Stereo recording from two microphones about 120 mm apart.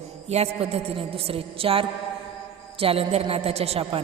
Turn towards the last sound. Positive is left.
turn(degrees=-55)  # may be behind; listen again after turning